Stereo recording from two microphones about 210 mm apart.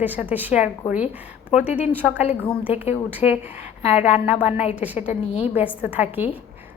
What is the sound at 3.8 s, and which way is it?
Speech, 30° left (ahead or behind).